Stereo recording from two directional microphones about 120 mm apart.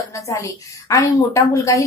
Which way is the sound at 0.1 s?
25° left (ahead or behind).